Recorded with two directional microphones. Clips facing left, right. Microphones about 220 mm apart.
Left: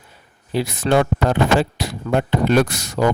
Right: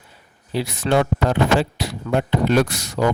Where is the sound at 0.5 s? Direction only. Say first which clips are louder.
Left 2 dB; 50° left (ahead or behind).